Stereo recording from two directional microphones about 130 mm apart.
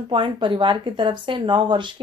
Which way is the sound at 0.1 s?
40° right (ahead or behind).